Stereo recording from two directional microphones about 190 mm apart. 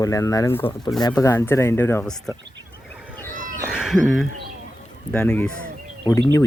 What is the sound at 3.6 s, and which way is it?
Cat, 5° right (ahead or behind).